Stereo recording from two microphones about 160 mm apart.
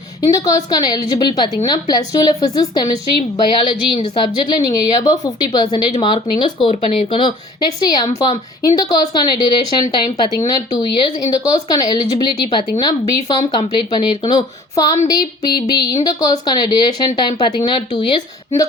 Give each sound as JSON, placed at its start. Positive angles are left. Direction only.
{"t": 0.2, "sound": "a woman's voice", "side_deg": 20}
{"t": 4.4, "sound": "speech", "side_deg": 25}
{"t": 6.7, "sound": "speech", "side_deg": 40}